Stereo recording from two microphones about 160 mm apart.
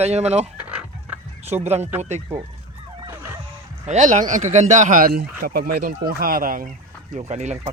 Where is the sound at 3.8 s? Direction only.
50° right (ahead or behind).